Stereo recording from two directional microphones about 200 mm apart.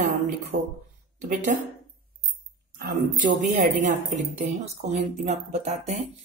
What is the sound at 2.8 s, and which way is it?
Speech, 40° right (ahead or behind).